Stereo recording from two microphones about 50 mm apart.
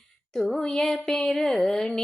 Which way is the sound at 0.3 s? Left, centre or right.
Centre.